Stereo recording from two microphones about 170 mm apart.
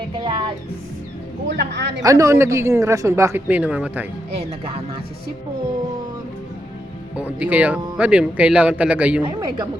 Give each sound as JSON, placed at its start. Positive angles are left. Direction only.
{"t": 0.3, "sound": "a woman's voice", "side_deg": -30}
{"t": 1.5, "sound": "a man's voice", "side_deg": -90}
{"t": 2.0, "sound": "speech", "side_deg": -20}
{"t": 4.4, "sound": "speech", "side_deg": -35}
{"t": 7.3, "sound": "speech", "side_deg": -10}
{"t": 9.2, "sound": "a woman's voice", "side_deg": -25}